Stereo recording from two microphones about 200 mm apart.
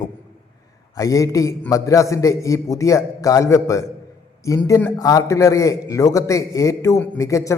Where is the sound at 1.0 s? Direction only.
15° left (ahead or behind).